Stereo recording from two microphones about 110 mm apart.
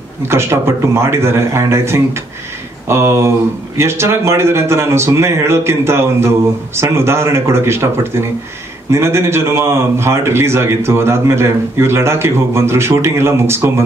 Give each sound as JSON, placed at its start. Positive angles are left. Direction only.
{"t": 0.3, "sound": "speech", "side_deg": -25}